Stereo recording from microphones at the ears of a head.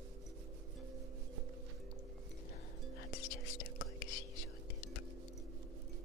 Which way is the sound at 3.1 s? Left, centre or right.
Left.